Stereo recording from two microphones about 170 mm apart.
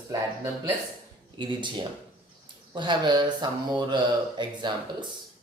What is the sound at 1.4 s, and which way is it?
Speech, 25° right (ahead or behind).